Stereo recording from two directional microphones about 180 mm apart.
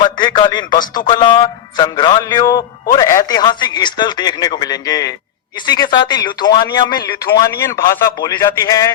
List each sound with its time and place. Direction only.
0.0 s a man's voice: 25° left (ahead or behind)